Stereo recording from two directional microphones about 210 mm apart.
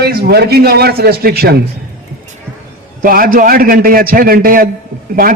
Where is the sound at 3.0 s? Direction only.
40° right (ahead or behind).